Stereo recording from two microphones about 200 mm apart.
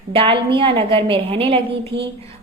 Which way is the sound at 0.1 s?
25° right (ahead or behind).